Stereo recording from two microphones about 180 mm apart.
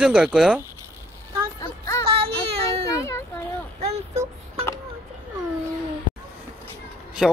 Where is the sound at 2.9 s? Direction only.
15° left (ahead or behind).